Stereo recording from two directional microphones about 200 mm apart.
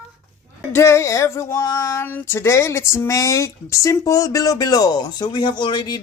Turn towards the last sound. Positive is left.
turn(degrees=20)  # may be behind; listen again after turning